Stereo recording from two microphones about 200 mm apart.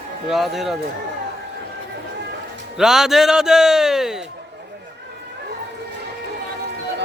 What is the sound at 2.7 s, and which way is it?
A man's voice, centre (ahead or behind).